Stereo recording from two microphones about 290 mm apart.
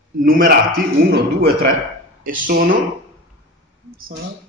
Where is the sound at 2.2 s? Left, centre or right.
Right.